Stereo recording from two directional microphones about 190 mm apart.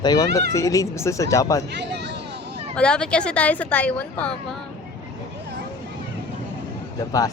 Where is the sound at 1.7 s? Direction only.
65° right (ahead or behind).